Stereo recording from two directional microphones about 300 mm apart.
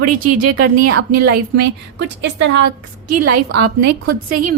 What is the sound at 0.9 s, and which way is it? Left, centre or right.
Speech, right.